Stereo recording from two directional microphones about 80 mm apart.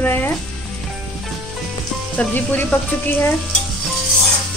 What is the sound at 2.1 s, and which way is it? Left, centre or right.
A woman's voice, centre.